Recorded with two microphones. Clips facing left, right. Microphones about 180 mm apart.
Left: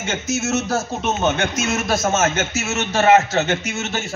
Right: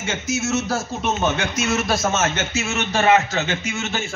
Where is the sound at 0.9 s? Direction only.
45° left (ahead or behind).